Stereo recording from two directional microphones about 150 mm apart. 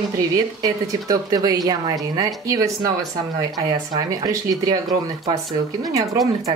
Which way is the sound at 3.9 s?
25° right (ahead or behind).